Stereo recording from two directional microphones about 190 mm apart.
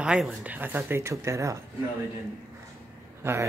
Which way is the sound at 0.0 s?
5° right (ahead or behind).